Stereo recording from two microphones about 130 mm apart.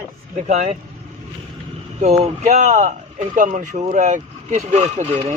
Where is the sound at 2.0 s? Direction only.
55° right (ahead or behind).